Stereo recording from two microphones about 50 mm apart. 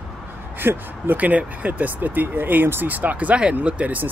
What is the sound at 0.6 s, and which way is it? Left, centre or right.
Speech, right.